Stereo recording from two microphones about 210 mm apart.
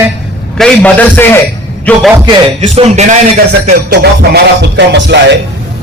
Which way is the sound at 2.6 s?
35° right (ahead or behind).